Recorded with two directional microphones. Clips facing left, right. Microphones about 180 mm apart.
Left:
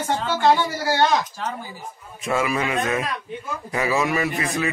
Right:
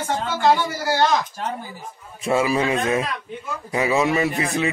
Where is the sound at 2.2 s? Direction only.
30° right (ahead or behind).